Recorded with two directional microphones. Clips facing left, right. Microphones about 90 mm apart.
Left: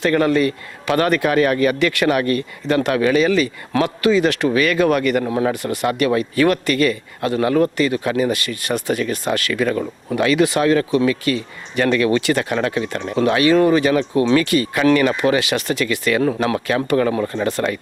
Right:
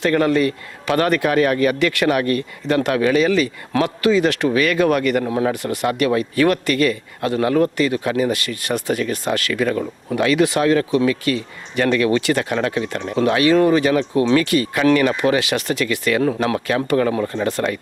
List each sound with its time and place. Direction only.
0.0 s a man's voice: 20° left (ahead or behind)